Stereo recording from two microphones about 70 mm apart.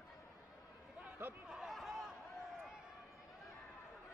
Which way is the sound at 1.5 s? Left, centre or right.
Centre.